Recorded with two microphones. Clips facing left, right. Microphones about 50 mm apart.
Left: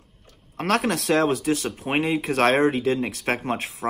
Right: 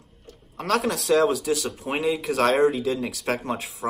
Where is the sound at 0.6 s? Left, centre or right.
Left.